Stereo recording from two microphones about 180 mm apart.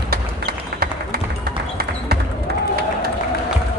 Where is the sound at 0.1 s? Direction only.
55° right (ahead or behind).